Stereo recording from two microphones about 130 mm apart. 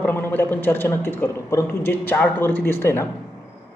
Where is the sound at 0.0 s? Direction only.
15° left (ahead or behind).